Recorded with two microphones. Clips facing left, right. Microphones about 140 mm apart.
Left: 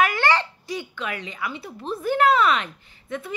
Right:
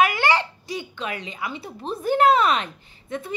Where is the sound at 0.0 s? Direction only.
15° right (ahead or behind).